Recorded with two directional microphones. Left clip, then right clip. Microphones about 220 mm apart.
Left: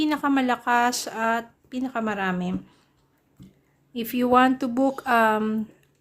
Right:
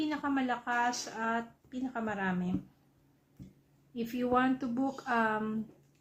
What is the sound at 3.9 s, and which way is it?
Speech, 50° left (ahead or behind).